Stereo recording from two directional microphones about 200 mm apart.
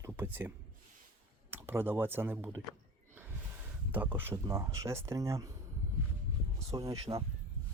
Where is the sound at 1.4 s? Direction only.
10° right (ahead or behind).